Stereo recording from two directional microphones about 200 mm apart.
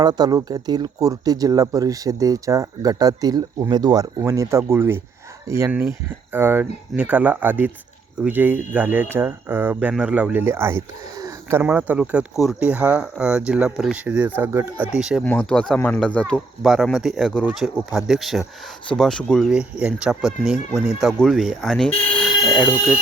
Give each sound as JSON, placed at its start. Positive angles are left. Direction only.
{"t": 0.0, "sound": "speech", "side_deg": -20}
{"t": 15.2, "sound": "speech", "side_deg": 5}
{"t": 22.2, "sound": "alarm", "side_deg": 0}